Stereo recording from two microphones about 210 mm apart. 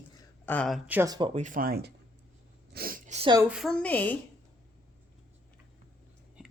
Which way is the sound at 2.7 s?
45° right (ahead or behind).